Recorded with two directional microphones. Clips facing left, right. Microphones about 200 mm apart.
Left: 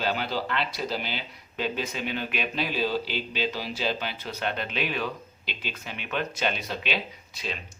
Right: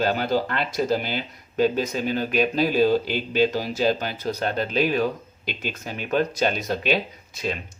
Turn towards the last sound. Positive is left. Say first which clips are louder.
# right 7 dB
turn(degrees=-45)  # may be behind; listen again after turning